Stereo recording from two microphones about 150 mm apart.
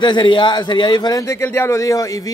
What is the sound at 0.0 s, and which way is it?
Speech, 30° left (ahead or behind).